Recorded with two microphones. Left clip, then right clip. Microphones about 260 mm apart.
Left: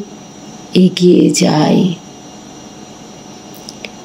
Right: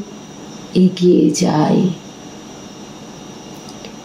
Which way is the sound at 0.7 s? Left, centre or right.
Left.